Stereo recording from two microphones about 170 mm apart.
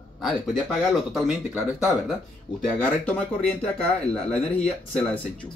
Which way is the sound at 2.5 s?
30° left (ahead or behind).